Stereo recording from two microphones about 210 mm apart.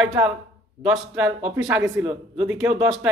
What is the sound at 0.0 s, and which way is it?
A man's voice, centre (ahead or behind).